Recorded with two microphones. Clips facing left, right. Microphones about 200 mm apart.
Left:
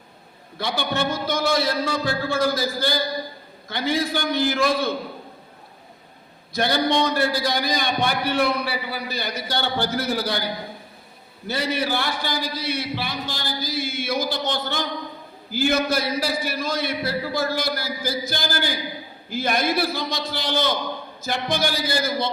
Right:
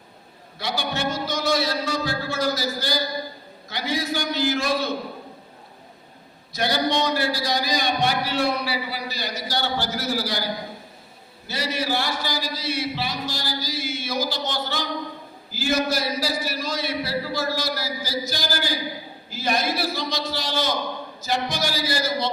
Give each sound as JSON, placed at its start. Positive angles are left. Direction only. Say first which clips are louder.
{"t": 0.6, "sound": "a man's voice", "louder": "left 2 dB", "side_deg": 55}
{"t": 6.5, "sound": "a man's voice", "louder": "left 2 dB", "side_deg": 55}
{"t": 11.4, "sound": "a man's voice", "louder": "left 2 dB", "side_deg": 55}